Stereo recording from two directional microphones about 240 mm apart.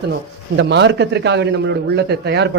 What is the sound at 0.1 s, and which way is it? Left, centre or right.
Speech, right.